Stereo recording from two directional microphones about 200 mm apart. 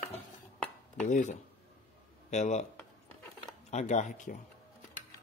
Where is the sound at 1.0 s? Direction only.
35° left (ahead or behind).